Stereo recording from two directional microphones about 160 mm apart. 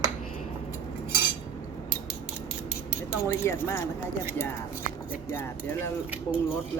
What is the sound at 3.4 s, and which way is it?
Speech, 15° left (ahead or behind).